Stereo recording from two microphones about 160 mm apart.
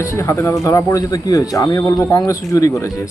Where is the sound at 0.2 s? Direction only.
20° left (ahead or behind).